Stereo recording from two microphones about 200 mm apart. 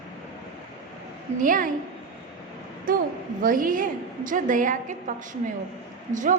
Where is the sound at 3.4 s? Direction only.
45° right (ahead or behind).